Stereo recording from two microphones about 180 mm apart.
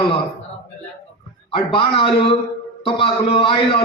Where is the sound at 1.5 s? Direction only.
30° left (ahead or behind).